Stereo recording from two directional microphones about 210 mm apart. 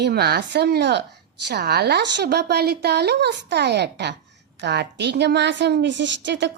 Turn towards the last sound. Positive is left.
turn(degrees=-55)  # may be behind; listen again after turning